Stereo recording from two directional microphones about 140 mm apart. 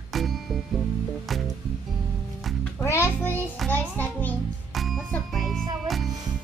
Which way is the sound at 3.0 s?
15° left (ahead or behind).